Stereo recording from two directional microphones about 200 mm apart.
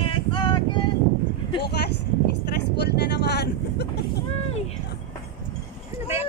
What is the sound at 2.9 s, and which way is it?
Vehicle, 55° left (ahead or behind).